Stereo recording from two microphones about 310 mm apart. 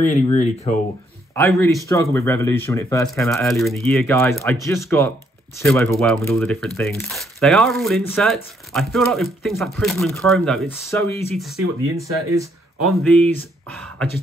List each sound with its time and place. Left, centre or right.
0.0 s speech: left
1.3 s speech: centre
12.0 s speech: centre
12.8 s speech: centre